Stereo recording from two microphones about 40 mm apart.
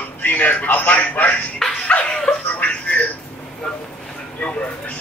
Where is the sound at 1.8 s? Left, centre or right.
Left.